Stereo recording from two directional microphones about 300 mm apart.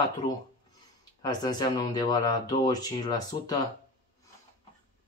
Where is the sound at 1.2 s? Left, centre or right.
Centre.